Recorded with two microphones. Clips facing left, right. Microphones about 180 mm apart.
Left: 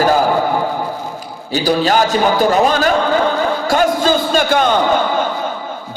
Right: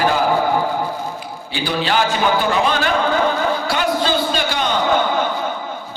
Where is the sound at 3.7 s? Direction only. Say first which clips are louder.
Left 5 dB; 45° left (ahead or behind).